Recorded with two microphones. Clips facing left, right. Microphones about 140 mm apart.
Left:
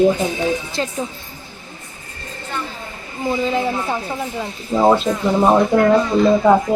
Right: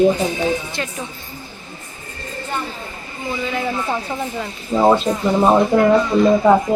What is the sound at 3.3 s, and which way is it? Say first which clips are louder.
Speech: left 4 dB; 25° left (ahead or behind).